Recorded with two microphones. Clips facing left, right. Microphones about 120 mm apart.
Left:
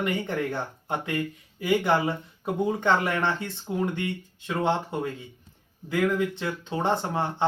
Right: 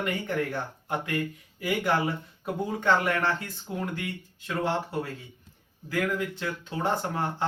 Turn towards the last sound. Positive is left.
turn(degrees=25)  # may be behind; listen again after turning